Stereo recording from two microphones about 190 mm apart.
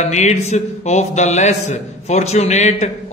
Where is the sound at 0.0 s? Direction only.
35° left (ahead or behind).